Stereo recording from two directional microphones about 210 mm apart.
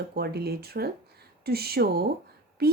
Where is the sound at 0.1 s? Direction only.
50° right (ahead or behind).